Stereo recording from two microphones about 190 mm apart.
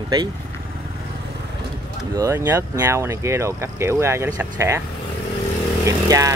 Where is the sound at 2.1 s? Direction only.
15° right (ahead or behind).